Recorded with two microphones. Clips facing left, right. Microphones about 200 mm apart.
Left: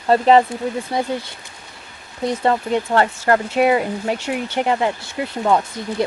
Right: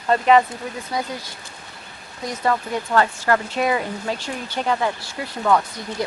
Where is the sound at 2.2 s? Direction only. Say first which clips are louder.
Left 4 dB; 25° left (ahead or behind).